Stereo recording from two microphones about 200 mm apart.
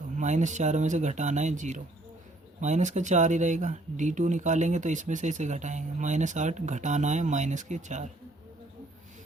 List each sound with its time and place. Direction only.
0.2 s speech: 35° right (ahead or behind)